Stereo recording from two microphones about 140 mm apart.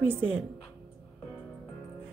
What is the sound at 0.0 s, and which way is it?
Speech, 15° right (ahead or behind).